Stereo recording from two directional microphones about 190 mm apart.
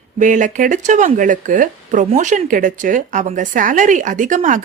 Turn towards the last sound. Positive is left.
turn(degrees=-40)  # may be behind; listen again after turning